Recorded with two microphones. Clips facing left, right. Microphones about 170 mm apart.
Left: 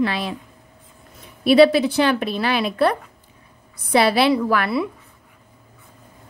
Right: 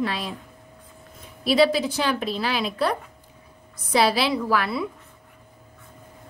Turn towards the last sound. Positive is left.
turn(degrees=60)  # may be behind; listen again after turning